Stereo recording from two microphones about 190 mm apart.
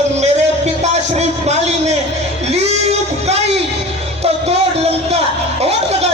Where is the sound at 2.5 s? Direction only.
35° right (ahead or behind).